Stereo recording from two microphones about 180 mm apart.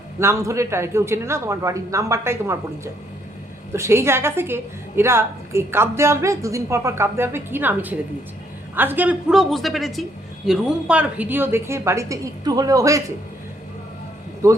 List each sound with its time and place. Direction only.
0.2 s a man's voice: 15° right (ahead or behind)
14.4 s a man's voice: 15° right (ahead or behind)